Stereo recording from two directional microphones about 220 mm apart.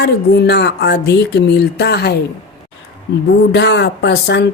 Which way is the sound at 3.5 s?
50° left (ahead or behind).